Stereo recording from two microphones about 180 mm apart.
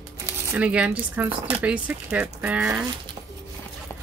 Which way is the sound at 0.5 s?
5° right (ahead or behind).